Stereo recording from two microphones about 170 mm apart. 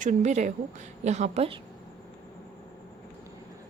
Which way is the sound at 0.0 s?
45° right (ahead or behind).